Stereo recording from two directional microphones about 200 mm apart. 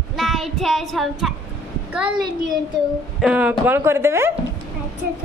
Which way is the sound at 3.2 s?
5° right (ahead or behind).